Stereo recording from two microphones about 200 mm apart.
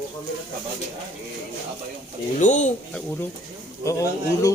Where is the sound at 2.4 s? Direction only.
35° left (ahead or behind).